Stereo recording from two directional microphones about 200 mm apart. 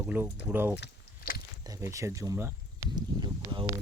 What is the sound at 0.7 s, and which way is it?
Biting, 55° left (ahead or behind).